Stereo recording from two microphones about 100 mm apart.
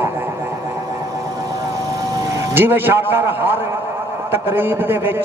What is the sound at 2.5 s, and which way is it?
A man's voice, 20° right (ahead or behind).